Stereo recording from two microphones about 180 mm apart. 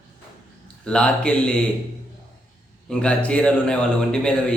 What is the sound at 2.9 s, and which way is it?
A man's voice, 5° left (ahead or behind).